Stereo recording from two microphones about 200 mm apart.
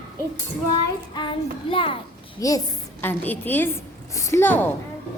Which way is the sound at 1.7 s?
25° left (ahead or behind).